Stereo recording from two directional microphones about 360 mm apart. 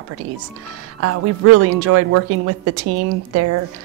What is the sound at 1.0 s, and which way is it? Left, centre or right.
Speech, right.